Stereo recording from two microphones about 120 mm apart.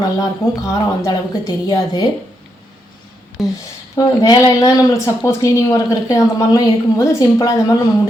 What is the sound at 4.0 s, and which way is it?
A woman's voice, 35° left (ahead or behind).